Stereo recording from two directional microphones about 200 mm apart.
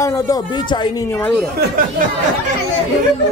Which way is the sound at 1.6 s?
45° right (ahead or behind).